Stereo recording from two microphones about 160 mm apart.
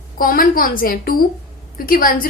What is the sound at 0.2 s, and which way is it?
A woman's voice, 65° left (ahead or behind).